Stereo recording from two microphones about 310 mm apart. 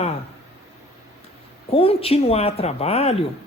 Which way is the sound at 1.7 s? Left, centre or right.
Centre.